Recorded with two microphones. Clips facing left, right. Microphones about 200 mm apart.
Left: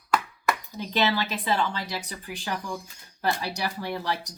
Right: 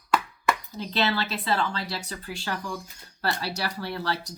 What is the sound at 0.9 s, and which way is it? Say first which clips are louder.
Speech: left 1 dB; 15° left (ahead or behind).